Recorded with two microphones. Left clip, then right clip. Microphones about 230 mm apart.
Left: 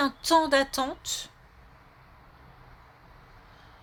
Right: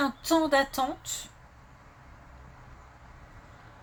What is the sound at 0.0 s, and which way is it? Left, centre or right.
Speech, left.